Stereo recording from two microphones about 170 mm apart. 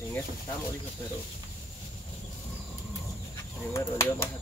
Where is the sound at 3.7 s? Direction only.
15° left (ahead or behind).